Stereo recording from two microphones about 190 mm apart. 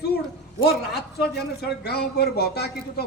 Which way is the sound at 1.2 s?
55° left (ahead or behind).